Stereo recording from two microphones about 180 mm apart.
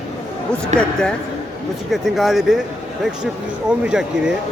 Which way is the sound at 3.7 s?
5° right (ahead or behind).